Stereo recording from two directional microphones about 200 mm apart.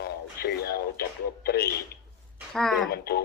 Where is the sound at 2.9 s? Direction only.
55° left (ahead or behind).